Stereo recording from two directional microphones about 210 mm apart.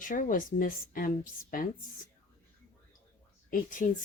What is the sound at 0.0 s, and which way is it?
Speech, 40° left (ahead or behind).